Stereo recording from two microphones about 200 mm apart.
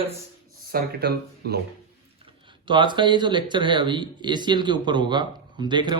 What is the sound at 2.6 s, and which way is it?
Speech, 25° right (ahead or behind).